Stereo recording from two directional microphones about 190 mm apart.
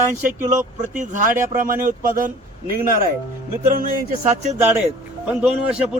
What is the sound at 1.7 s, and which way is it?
A man's voice, 45° right (ahead or behind).